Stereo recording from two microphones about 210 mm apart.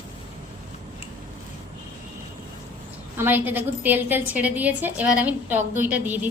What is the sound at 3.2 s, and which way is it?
A woman's voice, 10° right (ahead or behind).